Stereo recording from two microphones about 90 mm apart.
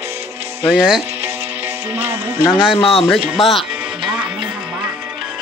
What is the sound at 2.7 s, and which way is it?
Speech, 90° left.